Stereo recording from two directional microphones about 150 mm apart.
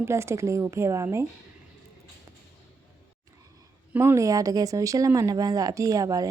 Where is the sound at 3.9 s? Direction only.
15° right (ahead or behind).